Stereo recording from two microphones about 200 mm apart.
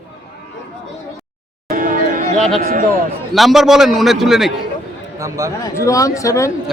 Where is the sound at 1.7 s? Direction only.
45° right (ahead or behind).